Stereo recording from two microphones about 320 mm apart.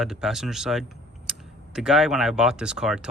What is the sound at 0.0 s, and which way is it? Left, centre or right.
Speech, centre.